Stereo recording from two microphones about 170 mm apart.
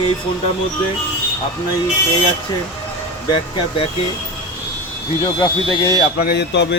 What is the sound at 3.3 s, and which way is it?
Speech, 35° left (ahead or behind).